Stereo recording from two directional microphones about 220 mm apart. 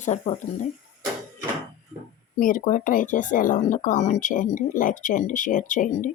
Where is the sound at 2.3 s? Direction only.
35° left (ahead or behind).